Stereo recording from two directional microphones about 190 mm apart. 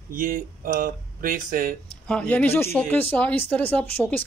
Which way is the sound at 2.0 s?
5° left (ahead or behind).